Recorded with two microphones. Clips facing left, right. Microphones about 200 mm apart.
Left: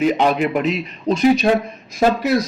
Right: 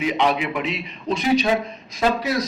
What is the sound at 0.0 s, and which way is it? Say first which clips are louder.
Speech: left 5 dB; 45° left (ahead or behind).